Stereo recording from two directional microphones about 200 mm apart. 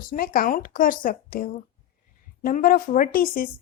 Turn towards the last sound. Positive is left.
turn(degrees=45)  # may be behind; listen again after turning